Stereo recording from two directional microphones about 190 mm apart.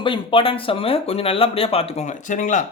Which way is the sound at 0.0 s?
25° left (ahead or behind).